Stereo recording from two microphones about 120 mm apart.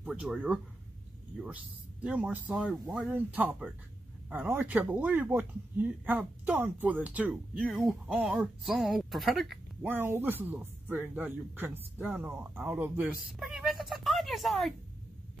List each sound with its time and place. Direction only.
0.0 s speech: 5° right (ahead or behind)
9.8 s speech: 20° right (ahead or behind)
13.1 s speech: 5° right (ahead or behind)